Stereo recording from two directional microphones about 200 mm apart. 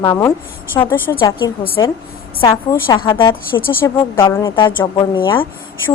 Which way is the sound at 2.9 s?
20° left (ahead or behind).